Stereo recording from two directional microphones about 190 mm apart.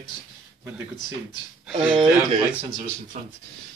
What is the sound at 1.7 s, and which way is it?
Speech, 5° right (ahead or behind).